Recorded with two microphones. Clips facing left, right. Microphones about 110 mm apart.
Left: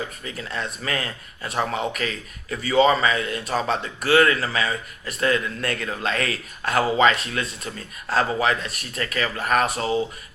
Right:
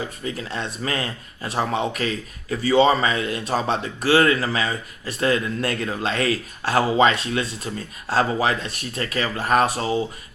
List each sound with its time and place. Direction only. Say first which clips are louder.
0.3 s speech: right 4 dB; 30° right (ahead or behind)